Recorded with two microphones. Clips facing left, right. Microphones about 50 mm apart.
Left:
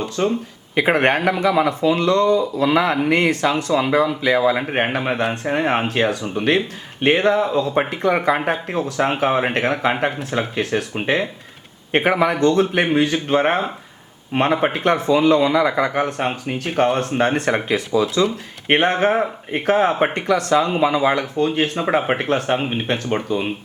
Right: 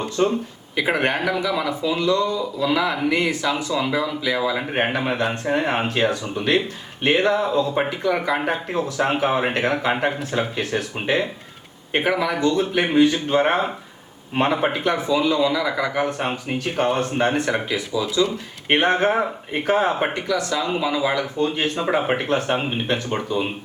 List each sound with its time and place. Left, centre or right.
0.2 s speech: centre
0.8 s speech: left
2.0 s speech: left
5.1 s speech: left
12.4 s speech: left